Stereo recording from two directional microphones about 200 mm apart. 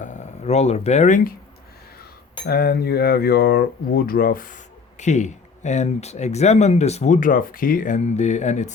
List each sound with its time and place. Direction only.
0.0 s speech: 35° left (ahead or behind)
2.5 s speech: 50° left (ahead or behind); by 8.7 s 35° left (ahead or behind)